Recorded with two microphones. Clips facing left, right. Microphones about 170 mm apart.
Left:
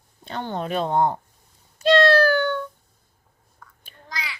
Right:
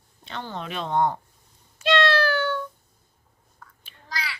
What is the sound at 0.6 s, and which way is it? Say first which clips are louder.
Speech: left 3 dB; 40° left (ahead or behind).